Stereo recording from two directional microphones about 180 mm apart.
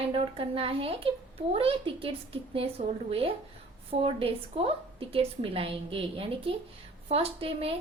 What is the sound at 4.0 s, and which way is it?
A woman's voice, 30° right (ahead or behind).